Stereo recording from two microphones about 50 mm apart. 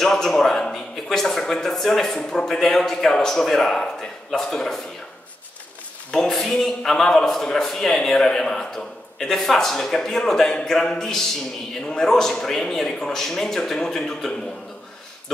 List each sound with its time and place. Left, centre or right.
0.0 s a man's voice: centre
6.1 s a man's voice: centre